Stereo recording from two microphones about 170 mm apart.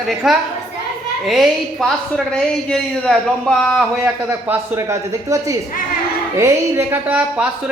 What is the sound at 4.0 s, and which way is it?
Speech, 10° right (ahead or behind).